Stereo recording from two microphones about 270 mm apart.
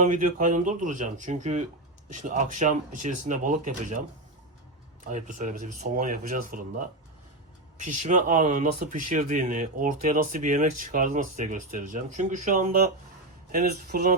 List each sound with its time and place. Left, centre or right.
0.0 s speech: right
5.4 s speech: right